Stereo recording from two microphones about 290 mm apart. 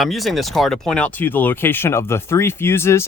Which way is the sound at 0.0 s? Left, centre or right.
Centre.